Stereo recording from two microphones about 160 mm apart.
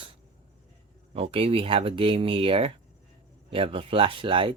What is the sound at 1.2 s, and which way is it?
Speech, 40° right (ahead or behind).